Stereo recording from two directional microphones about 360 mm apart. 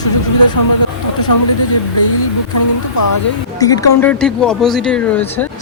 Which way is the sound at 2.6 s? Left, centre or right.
Left.